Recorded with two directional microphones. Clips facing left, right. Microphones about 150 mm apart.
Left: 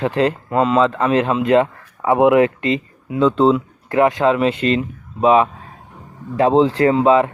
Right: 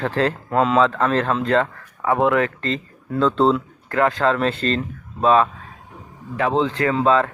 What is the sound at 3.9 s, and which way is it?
Speech, 20° left (ahead or behind).